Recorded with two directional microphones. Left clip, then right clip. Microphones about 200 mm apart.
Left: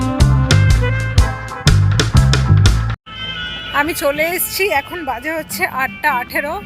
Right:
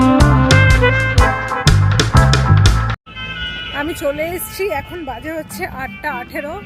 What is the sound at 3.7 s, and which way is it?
Speech, 5° right (ahead or behind).